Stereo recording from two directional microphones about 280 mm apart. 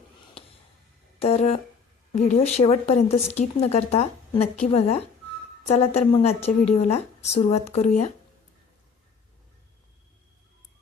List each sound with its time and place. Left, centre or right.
1.2 s a woman's voice: left